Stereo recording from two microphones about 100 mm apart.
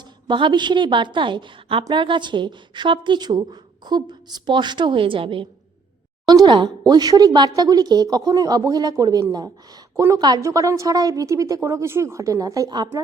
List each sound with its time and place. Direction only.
0.0 s a woman's voice: 55° right (ahead or behind)
6.2 s a woman's voice: 45° right (ahead or behind)
10.4 s speech: 30° right (ahead or behind)